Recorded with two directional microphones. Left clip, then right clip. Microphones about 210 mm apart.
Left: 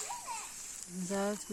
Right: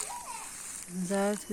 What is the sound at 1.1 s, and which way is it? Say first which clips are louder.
Speech: right 5 dB; 10° left (ahead or behind).